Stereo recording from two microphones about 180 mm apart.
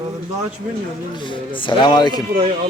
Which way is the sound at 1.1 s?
25° left (ahead or behind).